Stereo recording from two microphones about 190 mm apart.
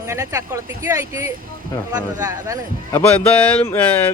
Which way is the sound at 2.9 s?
10° left (ahead or behind).